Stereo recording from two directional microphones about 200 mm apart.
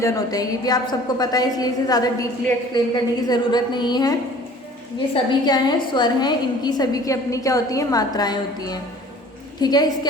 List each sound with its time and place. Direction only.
0.0 s a woman's voice: 20° left (ahead or behind)